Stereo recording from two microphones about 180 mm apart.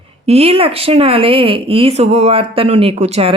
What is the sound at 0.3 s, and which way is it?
Speech, 35° right (ahead or behind).